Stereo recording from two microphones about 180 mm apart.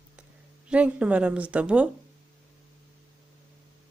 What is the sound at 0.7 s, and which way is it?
Speech, 5° right (ahead or behind).